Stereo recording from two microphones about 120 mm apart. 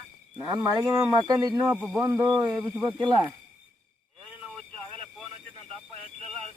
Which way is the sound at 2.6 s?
15° right (ahead or behind).